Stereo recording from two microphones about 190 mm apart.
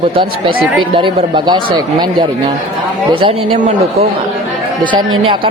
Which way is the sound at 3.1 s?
30° right (ahead or behind).